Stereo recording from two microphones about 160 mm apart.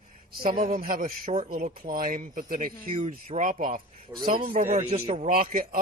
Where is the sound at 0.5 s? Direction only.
60° right (ahead or behind).